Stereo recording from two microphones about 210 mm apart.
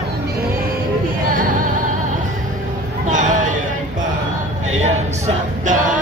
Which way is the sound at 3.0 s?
35° right (ahead or behind).